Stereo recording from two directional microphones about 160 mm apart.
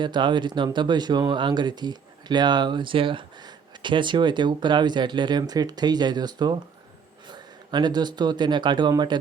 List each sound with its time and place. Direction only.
0.0 s speech: 30° right (ahead or behind)